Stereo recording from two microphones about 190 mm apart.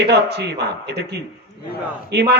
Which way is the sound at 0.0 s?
60° right (ahead or behind).